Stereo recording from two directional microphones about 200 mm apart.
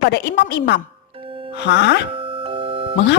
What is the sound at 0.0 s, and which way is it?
A woman's voice, 55° left (ahead or behind).